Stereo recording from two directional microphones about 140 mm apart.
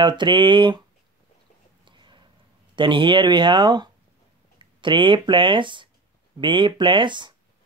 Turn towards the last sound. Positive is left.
turn(degrees=-35)  # may be behind; listen again after turning